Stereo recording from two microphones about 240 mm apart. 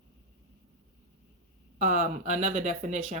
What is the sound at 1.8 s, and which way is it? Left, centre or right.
Speech, right.